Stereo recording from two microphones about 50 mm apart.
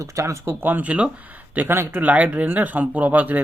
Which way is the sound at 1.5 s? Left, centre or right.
Right.